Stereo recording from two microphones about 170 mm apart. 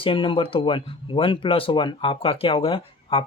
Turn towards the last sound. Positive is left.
turn(degrees=30)  # may be behind; listen again after turning